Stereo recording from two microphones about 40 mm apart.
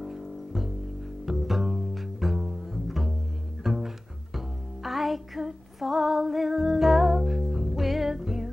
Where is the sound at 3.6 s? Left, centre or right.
Centre.